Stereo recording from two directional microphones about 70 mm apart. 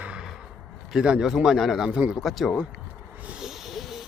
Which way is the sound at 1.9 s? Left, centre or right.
Centre.